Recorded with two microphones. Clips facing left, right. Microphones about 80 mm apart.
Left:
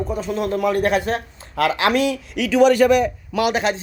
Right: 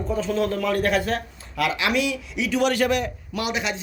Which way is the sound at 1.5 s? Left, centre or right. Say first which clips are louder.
Left 5 dB; left.